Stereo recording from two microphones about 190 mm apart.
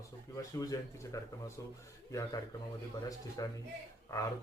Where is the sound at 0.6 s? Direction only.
20° left (ahead or behind).